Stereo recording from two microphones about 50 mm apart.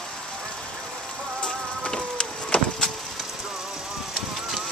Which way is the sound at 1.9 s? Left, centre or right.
Centre.